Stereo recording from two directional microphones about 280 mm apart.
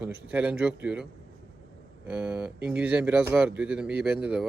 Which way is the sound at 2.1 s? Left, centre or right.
Centre.